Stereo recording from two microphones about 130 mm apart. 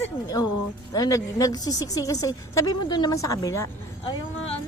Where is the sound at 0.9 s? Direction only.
25° left (ahead or behind).